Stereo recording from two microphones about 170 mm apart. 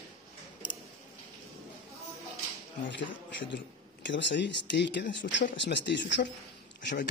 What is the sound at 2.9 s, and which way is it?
Speech, 90° left.